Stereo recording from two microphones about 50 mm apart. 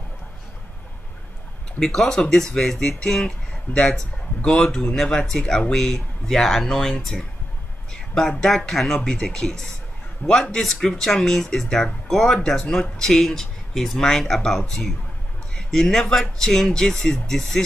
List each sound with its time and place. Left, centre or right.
1.8 s speech: centre